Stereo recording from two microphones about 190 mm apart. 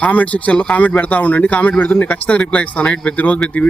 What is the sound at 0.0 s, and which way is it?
A man's voice, 5° left (ahead or behind).